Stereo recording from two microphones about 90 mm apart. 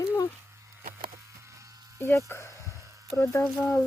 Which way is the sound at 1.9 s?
25° left (ahead or behind).